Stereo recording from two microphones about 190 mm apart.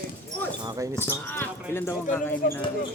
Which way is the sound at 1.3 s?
10° left (ahead or behind).